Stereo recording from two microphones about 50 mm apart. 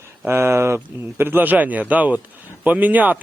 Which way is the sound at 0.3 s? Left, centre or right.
Right.